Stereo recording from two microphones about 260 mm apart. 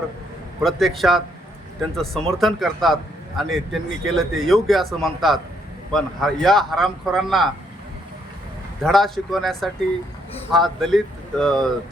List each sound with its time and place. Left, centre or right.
0.6 s a man's voice: centre
8.8 s a man's voice: centre